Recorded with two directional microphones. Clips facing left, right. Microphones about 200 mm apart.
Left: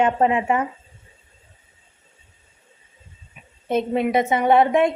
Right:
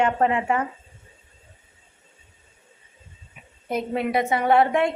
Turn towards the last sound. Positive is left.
turn(degrees=20)  # may be behind; listen again after turning